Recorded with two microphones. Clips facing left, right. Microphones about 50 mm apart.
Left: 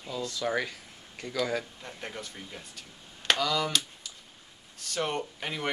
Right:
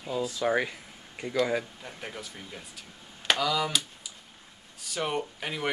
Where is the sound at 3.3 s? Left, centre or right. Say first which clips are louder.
Right 1 dB; centre.